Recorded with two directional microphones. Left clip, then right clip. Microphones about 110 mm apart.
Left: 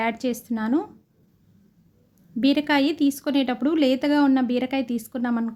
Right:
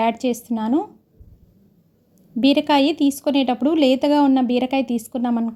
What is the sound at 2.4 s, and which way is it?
A woman's voice, 20° right (ahead or behind).